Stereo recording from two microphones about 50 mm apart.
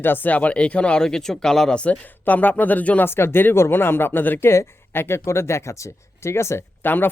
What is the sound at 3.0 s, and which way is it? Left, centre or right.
Speech, left.